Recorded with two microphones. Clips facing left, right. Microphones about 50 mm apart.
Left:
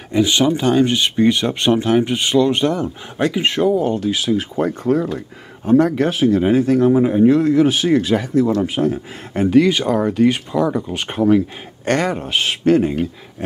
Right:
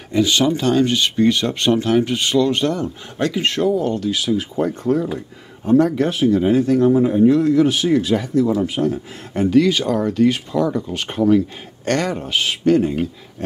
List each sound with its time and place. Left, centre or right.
0.1 s speech: left
4.6 s speech: centre
7.1 s speech: left